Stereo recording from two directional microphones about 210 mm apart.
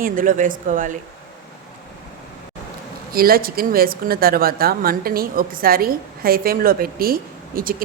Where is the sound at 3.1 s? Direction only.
45° right (ahead or behind).